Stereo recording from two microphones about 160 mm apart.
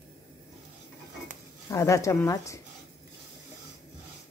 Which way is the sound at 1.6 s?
20° left (ahead or behind).